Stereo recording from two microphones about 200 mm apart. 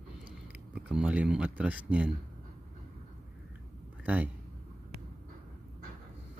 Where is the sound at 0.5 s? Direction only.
5° right (ahead or behind).